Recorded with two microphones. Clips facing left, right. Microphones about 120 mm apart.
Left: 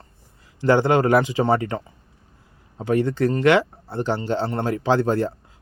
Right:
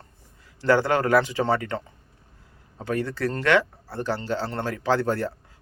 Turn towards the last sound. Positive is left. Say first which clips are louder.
# left 4 dB
turn(degrees=20)  # may be behind; listen again after turning